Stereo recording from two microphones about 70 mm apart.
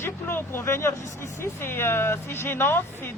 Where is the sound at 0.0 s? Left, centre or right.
Left.